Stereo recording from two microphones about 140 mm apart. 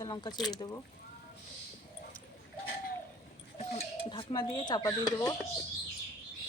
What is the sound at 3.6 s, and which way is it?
Goat, 50° left (ahead or behind).